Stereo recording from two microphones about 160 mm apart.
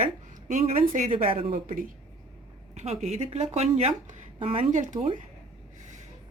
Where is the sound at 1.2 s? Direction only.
35° right (ahead or behind); by 5.1 s 50° right (ahead or behind).